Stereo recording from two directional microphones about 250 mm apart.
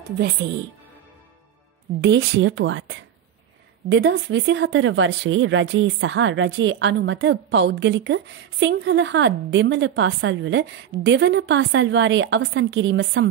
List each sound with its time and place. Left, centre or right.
2.0 s speech: right